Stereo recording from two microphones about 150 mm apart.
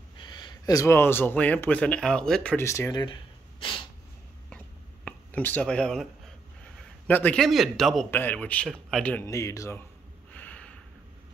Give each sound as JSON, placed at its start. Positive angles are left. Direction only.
{"t": 0.2, "sound": "speech", "side_deg": 30}
{"t": 2.6, "sound": "a sound", "side_deg": 20}
{"t": 5.0, "sound": "a sound", "side_deg": 10}
{"t": 7.1, "sound": "a man's voice", "side_deg": 10}
{"t": 9.2, "sound": "a man's voice", "side_deg": 20}
{"t": 10.3, "sound": "snort", "side_deg": 10}